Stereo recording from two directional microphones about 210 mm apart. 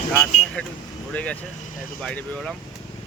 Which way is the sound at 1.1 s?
5° left (ahead or behind).